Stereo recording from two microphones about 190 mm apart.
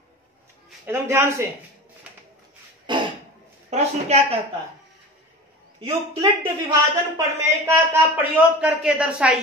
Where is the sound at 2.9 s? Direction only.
25° right (ahead or behind).